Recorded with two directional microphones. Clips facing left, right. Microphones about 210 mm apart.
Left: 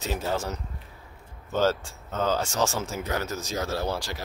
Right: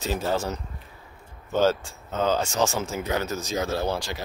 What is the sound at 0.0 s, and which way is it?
Speech, 30° right (ahead or behind).